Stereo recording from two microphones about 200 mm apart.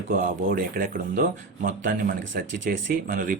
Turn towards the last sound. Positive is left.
turn(degrees=-40)  # may be behind; listen again after turning